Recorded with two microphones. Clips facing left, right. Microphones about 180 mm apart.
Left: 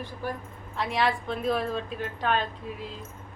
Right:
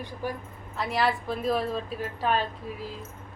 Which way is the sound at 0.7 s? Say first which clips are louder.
Even; centre (ahead or behind).